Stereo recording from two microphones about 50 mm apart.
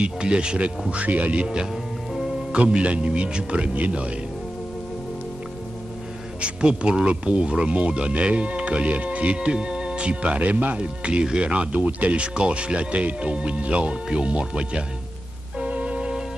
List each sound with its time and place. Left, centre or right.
0.0 s speech: centre
6.4 s speech: right
15.6 s music: right